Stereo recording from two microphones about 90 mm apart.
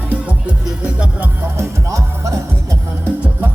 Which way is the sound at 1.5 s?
35° right (ahead or behind).